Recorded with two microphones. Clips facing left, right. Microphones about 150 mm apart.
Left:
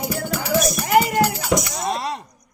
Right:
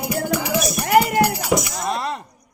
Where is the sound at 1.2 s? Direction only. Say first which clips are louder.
Right 1 dB; 5° right (ahead or behind).